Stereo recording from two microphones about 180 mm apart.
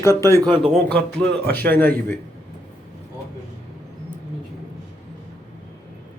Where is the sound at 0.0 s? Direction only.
15° left (ahead or behind).